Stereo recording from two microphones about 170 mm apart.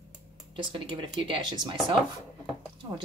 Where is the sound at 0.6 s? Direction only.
30° right (ahead or behind).